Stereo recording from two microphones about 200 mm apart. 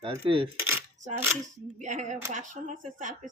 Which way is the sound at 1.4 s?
40° right (ahead or behind).